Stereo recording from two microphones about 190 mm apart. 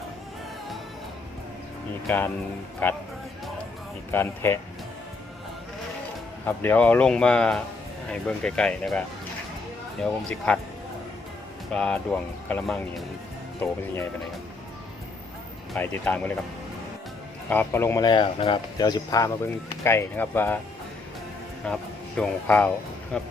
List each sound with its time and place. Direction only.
2.0 s speech: 10° left (ahead or behind)
4.1 s speech: 10° left (ahead or behind)
6.4 s speech: 10° left (ahead or behind)
11.7 s speech: 5° left (ahead or behind)
13.6 s speech: 15° left (ahead or behind)
15.7 s speech: 10° left (ahead or behind)
17.5 s speech: 10° left (ahead or behind)
21.6 s speech: 5° left (ahead or behind)